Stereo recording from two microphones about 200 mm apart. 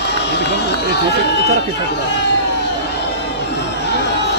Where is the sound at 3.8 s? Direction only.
55° left (ahead or behind).